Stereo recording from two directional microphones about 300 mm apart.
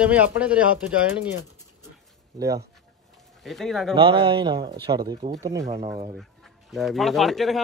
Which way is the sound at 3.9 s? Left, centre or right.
Centre.